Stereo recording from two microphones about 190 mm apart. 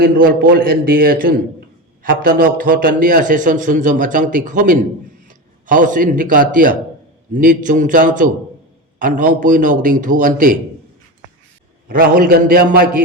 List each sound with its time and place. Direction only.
0.0 s a man's voice: 50° right (ahead or behind)
11.9 s a man's voice: 50° right (ahead or behind)